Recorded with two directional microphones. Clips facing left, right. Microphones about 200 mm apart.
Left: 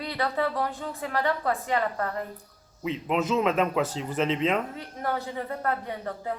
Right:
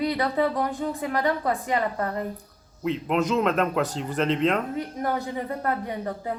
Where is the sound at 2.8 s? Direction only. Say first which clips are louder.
Right 3 dB; centre (ahead or behind).